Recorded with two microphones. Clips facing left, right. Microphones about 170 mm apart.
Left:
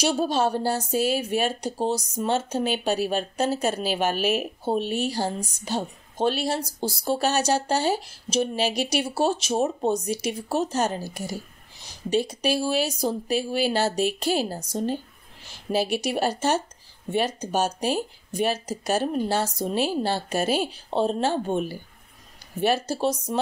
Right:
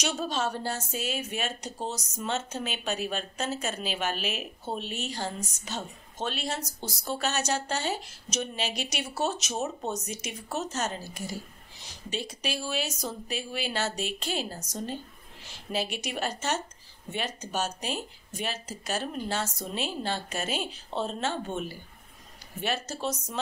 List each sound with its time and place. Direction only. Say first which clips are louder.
0.0 s a woman's voice: left 7 dB; 35° left (ahead or behind)
4.2 s speech: left 10 dB; 50° left (ahead or behind)
4.8 s a woman's voice: left 8 dB; 35° left (ahead or behind)